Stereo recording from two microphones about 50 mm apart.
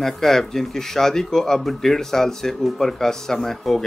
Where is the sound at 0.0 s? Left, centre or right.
Centre.